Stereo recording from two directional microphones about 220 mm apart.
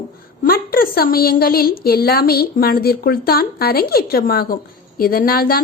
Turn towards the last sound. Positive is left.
turn(degrees=40)  # may be behind; listen again after turning